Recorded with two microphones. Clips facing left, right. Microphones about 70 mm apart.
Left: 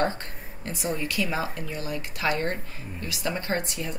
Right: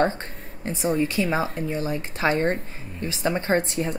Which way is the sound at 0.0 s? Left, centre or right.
Right.